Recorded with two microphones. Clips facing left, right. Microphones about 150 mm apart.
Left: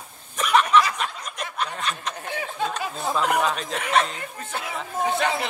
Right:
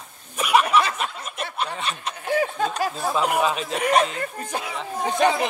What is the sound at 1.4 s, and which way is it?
Snicker, 30° right (ahead or behind).